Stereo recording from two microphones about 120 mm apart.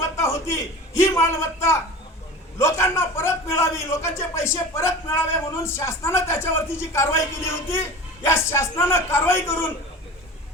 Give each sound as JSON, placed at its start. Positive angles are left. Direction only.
{"t": 0.0, "sound": "a man's voice", "side_deg": 25}